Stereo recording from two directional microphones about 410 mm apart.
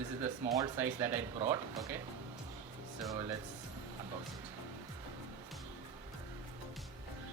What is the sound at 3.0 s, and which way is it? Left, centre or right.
Speech, centre.